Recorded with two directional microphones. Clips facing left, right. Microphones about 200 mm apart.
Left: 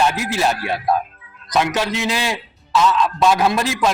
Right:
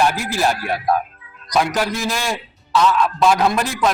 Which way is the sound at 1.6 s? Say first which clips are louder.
Even; 25° left (ahead or behind).